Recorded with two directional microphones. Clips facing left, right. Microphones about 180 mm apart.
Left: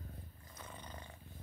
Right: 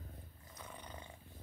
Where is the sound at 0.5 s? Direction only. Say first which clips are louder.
Even; 15° right (ahead or behind).